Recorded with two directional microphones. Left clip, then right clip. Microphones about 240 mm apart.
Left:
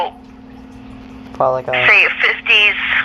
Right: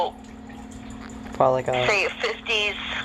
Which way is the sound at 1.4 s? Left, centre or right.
Centre.